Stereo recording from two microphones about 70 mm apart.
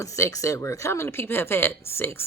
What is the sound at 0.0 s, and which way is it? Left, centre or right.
Speech, left.